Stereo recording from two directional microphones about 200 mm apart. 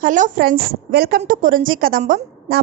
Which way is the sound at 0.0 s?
40° right (ahead or behind).